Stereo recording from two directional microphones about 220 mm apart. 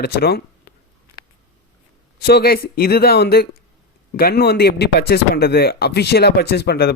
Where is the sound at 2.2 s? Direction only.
45° left (ahead or behind).